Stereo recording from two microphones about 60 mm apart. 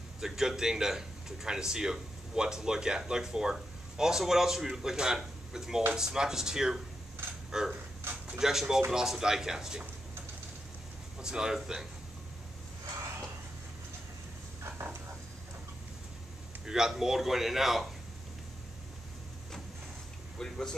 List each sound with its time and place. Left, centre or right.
0.2 s a man's voice: centre
11.1 s a man's voice: centre
14.6 s a sound: right
16.6 s a man's voice: centre
20.3 s speech: centre